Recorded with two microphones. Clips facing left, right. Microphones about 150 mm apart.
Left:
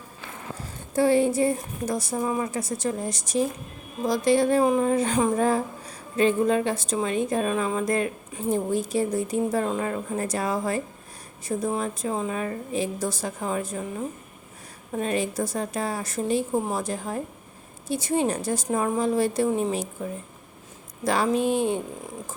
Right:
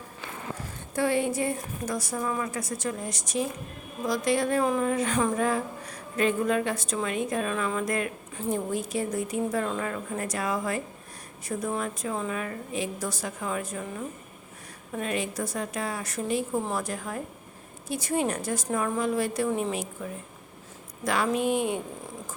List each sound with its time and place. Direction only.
0.9 s a woman's voice: 30° left (ahead or behind)
4.6 s a woman's voice: 20° left (ahead or behind)
4.9 s a woman's voice: 30° left (ahead or behind)
14.9 s a woman's voice: 35° left (ahead or behind)
21.0 s speech: 30° left (ahead or behind)